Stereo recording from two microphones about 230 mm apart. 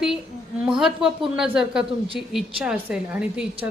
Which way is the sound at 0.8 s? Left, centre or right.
Centre.